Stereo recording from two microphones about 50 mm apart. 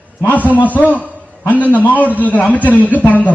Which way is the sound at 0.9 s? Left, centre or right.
Right.